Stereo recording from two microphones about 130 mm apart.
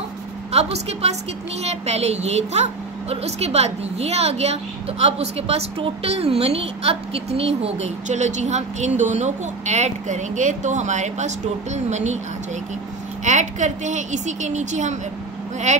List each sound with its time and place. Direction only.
0.5 s a woman's voice: 55° right (ahead or behind)
13.2 s a woman's voice: 65° right (ahead or behind)